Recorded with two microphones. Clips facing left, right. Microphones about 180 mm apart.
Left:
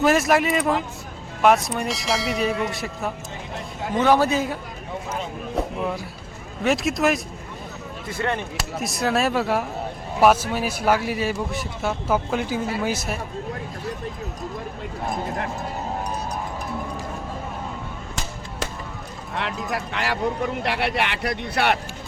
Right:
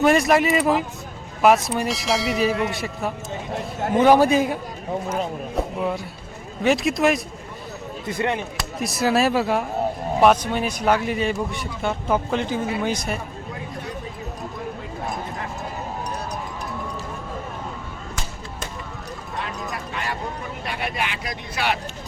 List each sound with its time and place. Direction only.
0.0 s speech: centre (ahead or behind)
3.9 s a man's voice: 15° right (ahead or behind)
5.8 s speech: centre (ahead or behind)
8.0 s a man's voice: 20° right (ahead or behind)
8.8 s speech: centre (ahead or behind)
19.4 s speech: 80° left; by 21.8 s 60° left (ahead or behind)